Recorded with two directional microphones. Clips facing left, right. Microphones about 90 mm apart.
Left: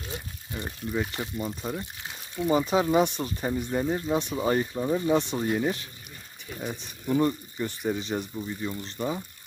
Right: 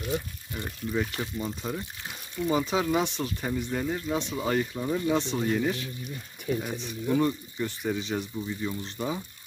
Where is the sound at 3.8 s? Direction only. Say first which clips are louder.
Left 2 dB; 30° left (ahead or behind).